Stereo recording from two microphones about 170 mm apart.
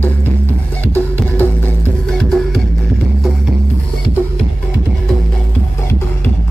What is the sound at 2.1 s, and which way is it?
Music, 5° left (ahead or behind).